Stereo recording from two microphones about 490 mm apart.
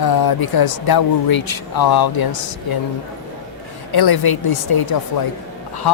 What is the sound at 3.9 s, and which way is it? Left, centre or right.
Speech, left.